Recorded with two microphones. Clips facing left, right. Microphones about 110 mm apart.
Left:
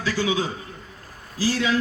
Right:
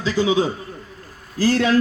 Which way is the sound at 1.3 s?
50° right (ahead or behind).